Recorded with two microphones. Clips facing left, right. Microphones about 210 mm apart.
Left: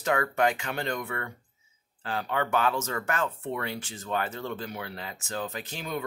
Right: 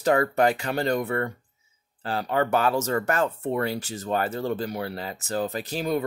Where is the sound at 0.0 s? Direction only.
35° right (ahead or behind).